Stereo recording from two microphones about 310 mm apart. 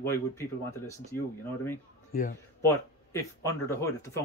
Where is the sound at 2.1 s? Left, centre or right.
Left.